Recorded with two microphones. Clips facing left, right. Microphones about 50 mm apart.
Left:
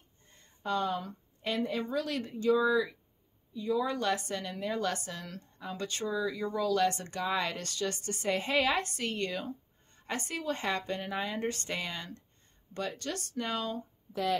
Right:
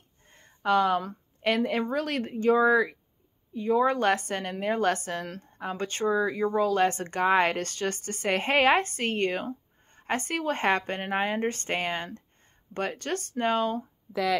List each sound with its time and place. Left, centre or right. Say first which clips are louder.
0.3 s a woman's voice: right 9 dB; right
3.5 s a woman's voice: right 7 dB; right